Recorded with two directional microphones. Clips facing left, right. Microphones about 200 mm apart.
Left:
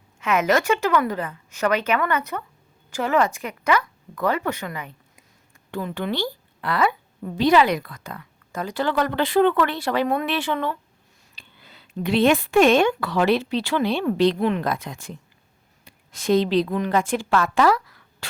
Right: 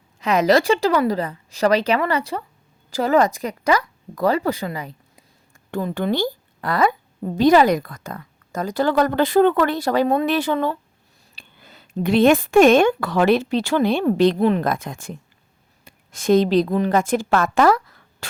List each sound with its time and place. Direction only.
0.2 s a woman's voice: 35° right (ahead or behind)